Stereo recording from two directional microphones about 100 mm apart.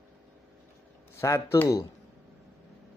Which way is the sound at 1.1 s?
30° left (ahead or behind).